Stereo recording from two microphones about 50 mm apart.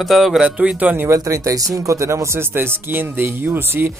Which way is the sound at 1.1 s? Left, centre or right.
Right.